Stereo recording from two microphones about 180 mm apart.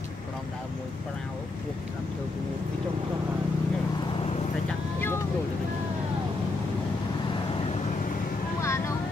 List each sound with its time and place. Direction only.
8.6 s vehicle: 15° left (ahead or behind)